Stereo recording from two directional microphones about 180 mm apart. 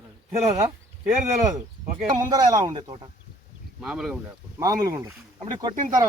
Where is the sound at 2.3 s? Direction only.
20° right (ahead or behind).